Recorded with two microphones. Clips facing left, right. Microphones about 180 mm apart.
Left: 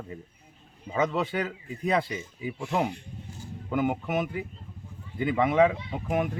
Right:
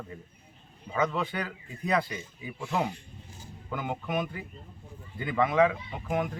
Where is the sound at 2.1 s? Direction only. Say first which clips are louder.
Left 5 dB; 15° left (ahead or behind).